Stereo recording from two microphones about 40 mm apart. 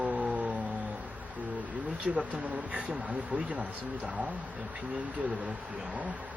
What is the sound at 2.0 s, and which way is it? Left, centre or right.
Speech, right.